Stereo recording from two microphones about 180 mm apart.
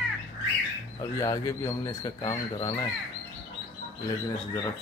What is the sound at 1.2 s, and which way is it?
Speech, 20° left (ahead or behind).